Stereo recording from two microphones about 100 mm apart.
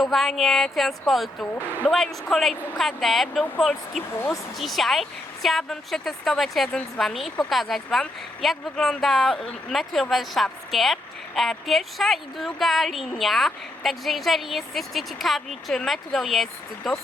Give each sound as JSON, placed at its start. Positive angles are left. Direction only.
{"t": 0.0, "sound": "a woman's voice", "side_deg": 0}